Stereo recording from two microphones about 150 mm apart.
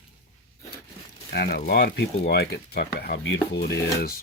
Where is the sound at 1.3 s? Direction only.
90° left.